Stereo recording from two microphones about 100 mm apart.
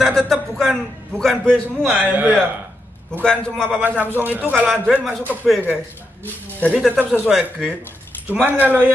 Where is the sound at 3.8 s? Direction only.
15° right (ahead or behind).